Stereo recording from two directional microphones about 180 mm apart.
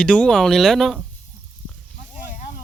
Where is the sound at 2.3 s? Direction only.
45° left (ahead or behind).